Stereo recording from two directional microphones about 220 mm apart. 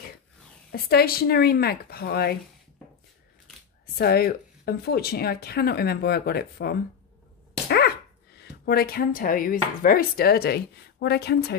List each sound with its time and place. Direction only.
0.7 s speech: 45° left (ahead or behind)
3.8 s speech: 45° left (ahead or behind)